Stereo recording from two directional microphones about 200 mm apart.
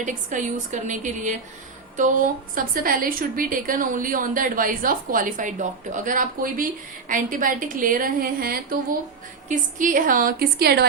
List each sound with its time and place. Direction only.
0.0 s a woman's voice: 40° right (ahead or behind)